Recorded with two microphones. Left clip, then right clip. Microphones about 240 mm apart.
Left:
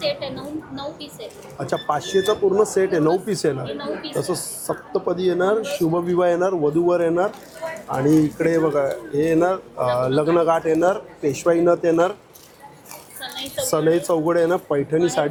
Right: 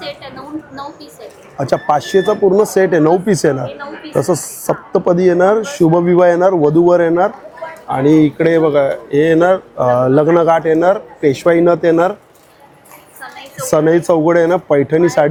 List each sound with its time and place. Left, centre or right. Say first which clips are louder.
0.0 s a sound: left 3 dB; centre
1.5 s speech: right 9 dB; right
11.3 s speech: right 5 dB; right
13.7 s speech: right 8 dB; right